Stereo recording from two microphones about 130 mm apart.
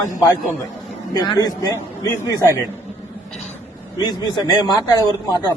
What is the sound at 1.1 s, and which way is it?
Speech, 35° left (ahead or behind).